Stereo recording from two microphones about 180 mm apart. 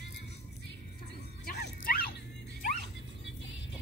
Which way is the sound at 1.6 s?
60° left (ahead or behind).